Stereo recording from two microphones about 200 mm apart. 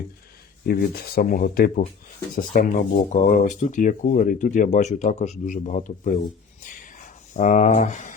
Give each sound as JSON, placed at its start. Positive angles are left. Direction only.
{"t": 0.6, "sound": "speech", "side_deg": 50}